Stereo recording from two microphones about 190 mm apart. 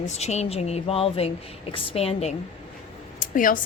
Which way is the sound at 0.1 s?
35° left (ahead or behind).